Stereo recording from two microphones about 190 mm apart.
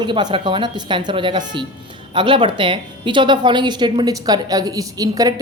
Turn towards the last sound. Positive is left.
turn(degrees=-20)  # may be behind; listen again after turning